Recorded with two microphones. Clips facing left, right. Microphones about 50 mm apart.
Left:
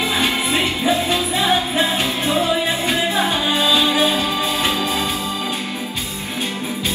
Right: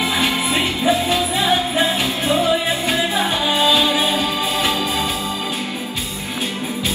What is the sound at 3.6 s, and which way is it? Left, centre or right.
Music, left.